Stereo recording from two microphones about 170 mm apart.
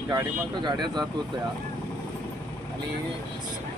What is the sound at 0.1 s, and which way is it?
Speech, 25° right (ahead or behind).